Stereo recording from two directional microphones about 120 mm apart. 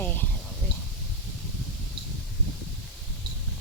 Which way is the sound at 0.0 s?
15° left (ahead or behind).